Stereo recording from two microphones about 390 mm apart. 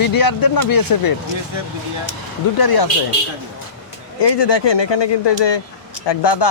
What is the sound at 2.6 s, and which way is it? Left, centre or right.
Speech, left.